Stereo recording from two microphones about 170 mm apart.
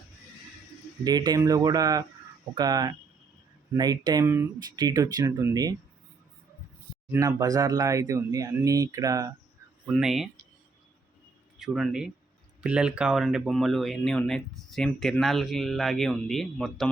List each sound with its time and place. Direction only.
1.0 s speech: 25° right (ahead or behind)
7.1 s speech: 20° right (ahead or behind)
9.8 s speech: centre (ahead or behind)
11.6 s speech: centre (ahead or behind)